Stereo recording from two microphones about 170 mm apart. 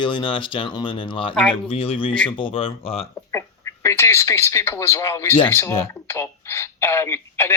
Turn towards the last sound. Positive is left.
turn(degrees=15)  # may be behind; listen again after turning